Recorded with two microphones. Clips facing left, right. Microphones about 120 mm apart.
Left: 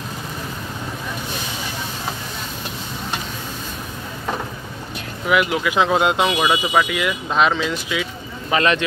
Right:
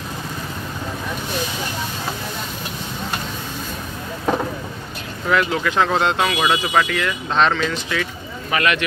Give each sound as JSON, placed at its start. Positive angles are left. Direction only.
{"t": 5.3, "sound": "speech", "side_deg": 10}
{"t": 8.5, "sound": "speech", "side_deg": 25}